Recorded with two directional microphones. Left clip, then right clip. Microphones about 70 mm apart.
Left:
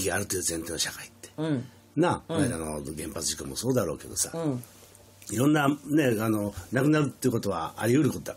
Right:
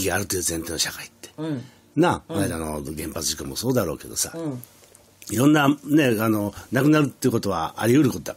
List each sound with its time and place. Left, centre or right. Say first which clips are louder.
0.0 s speech: right 5 dB; right
1.3 s speech: even; centre
2.0 s speech: right 4 dB; right